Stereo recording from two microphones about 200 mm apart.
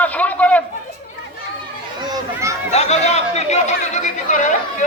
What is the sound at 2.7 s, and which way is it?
Chatter, 35° left (ahead or behind).